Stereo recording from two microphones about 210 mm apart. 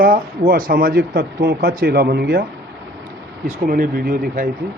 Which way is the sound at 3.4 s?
40° right (ahead or behind).